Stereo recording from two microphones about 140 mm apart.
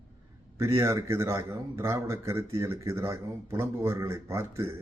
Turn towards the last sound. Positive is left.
turn(degrees=-20)  # may be behind; listen again after turning